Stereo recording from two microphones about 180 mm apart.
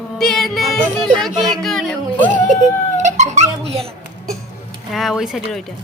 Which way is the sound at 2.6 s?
40° right (ahead or behind).